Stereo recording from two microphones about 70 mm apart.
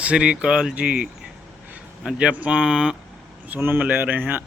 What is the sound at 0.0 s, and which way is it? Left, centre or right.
Speech, centre.